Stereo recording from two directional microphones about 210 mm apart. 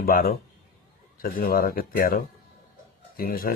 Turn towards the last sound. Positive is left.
turn(degrees=45)  # may be behind; listen again after turning